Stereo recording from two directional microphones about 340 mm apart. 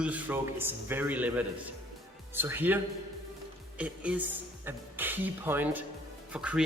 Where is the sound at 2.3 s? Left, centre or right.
Centre.